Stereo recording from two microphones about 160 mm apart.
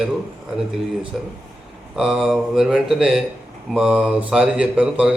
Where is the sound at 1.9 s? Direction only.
5° right (ahead or behind).